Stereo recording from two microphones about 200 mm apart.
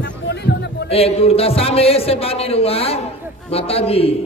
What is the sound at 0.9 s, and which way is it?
A man's voice, 30° left (ahead or behind).